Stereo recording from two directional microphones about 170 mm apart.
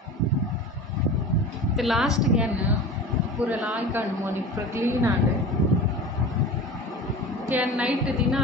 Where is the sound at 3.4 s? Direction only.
10° right (ahead or behind).